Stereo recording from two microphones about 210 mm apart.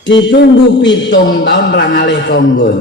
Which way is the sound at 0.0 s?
60° left (ahead or behind).